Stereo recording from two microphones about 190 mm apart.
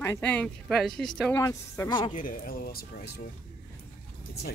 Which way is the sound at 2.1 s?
45° left (ahead or behind).